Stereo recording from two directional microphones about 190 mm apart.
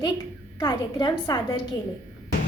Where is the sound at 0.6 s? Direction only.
20° left (ahead or behind).